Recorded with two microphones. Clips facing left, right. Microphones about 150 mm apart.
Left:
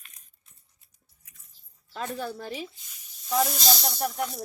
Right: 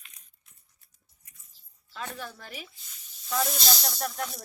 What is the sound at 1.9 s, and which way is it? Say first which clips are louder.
Speech: left 6 dB; 35° left (ahead or behind).